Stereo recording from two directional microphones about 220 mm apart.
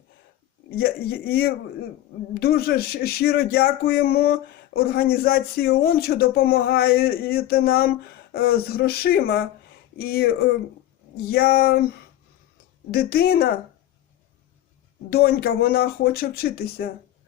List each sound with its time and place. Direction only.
0.8 s speech: 45° left (ahead or behind)
12.9 s speech: 45° left (ahead or behind)
15.1 s speech: 45° left (ahead or behind)